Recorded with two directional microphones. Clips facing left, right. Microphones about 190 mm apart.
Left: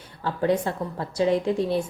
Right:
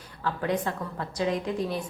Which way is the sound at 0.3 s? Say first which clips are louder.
Left 5 dB; 30° left (ahead or behind).